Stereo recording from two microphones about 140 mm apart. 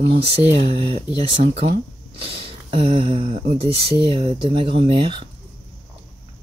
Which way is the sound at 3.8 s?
40° right (ahead or behind).